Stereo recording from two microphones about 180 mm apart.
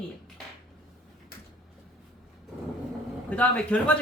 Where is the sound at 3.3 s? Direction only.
5° left (ahead or behind).